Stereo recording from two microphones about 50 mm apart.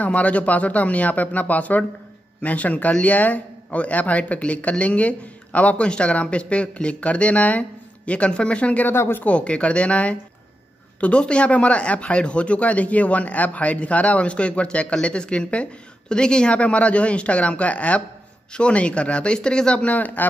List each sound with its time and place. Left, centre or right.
0.0 s speech: left
8.8 s speech: left
9.2 s speech: left